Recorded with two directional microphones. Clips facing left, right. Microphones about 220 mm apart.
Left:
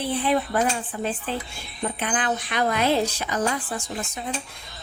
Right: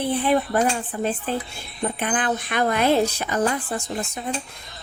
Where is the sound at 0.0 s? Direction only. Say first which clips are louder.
Right 3 dB; 55° right (ahead or behind).